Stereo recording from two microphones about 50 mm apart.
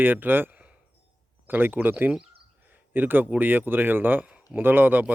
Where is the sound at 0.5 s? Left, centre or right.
Right.